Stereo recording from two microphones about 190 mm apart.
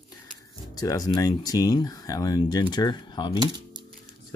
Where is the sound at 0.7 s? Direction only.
20° left (ahead or behind).